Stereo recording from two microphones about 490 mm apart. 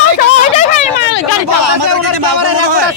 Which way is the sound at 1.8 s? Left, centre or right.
Right.